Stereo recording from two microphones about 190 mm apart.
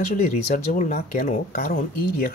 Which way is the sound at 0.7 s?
45° left (ahead or behind).